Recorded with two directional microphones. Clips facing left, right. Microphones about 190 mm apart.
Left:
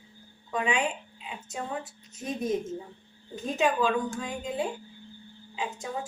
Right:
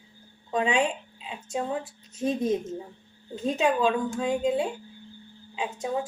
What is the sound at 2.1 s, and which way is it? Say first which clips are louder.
Speech: right 8 dB; 25° right (ahead or behind).